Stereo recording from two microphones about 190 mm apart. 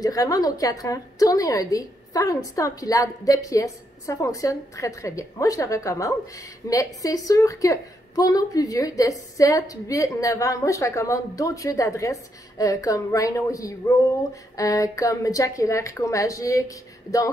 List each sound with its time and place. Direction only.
0.0 s a woman's voice: 20° left (ahead or behind)